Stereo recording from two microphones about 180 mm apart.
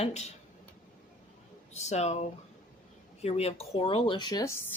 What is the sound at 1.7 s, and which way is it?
Speech, 40° left (ahead or behind).